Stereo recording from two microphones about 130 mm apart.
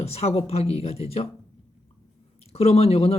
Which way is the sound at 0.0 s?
55° left (ahead or behind).